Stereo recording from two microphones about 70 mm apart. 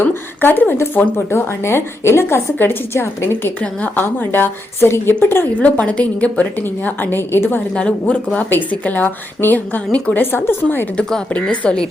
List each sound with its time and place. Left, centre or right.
0.0 s a sound: left
0.9 s a woman's voice: left
3.6 s a woman's voice: centre
5.5 s a woman's voice: left
7.8 s a woman's voice: centre
10.9 s speech: centre